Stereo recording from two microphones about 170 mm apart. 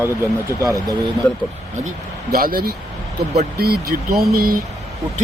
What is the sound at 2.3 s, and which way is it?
Speech, 60° right (ahead or behind).